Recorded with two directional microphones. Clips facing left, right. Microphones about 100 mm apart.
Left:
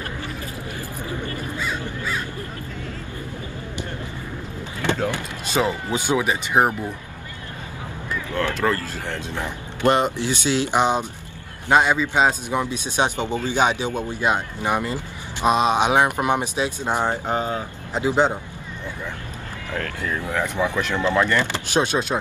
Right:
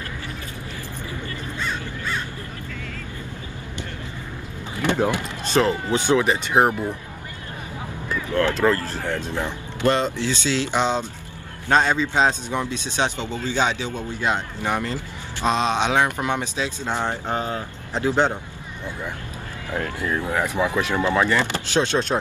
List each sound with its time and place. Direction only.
1.6 s crow: 5° left (ahead or behind)
4.8 s a sound: 20° right (ahead or behind)
5.5 s speech: 10° left (ahead or behind)
9.8 s speech: 15° left (ahead or behind)
19.7 s speech: 20° right (ahead or behind)
21.7 s speech: 10° left (ahead or behind)